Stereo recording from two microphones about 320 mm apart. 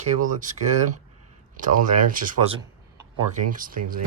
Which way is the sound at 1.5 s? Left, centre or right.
Right.